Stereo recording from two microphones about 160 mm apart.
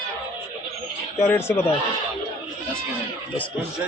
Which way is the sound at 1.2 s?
15° left (ahead or behind).